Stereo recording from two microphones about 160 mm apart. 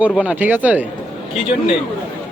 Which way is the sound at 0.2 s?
10° right (ahead or behind).